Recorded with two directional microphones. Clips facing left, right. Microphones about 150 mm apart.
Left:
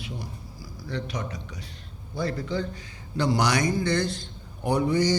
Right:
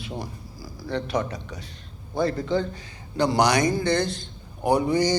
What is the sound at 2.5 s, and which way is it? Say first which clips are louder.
Speech: right 5 dB; 25° right (ahead or behind).